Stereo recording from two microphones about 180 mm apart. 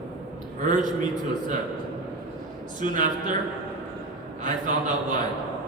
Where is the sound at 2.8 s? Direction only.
45° right (ahead or behind).